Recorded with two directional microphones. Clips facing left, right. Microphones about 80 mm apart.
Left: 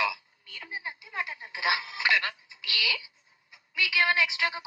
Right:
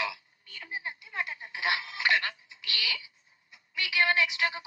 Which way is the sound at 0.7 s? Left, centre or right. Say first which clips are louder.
Even; left.